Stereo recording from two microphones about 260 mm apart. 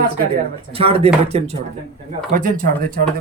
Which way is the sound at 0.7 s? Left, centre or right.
Right.